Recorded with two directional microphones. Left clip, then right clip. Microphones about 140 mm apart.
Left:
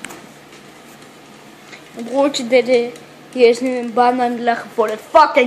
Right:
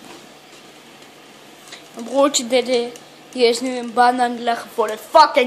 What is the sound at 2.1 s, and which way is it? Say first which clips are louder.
A woman's voice: left 2 dB; 25° right (ahead or behind).